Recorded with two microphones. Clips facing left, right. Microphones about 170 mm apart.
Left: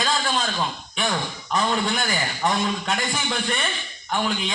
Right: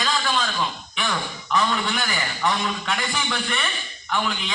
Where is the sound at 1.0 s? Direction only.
35° left (ahead or behind).